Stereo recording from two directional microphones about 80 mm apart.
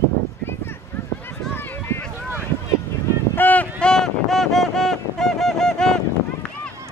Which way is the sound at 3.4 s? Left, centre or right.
Left.